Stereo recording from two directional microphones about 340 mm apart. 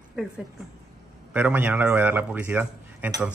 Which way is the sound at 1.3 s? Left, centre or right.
Centre.